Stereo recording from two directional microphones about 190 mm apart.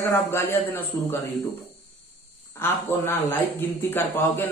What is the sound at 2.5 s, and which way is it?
Speech, 10° left (ahead or behind).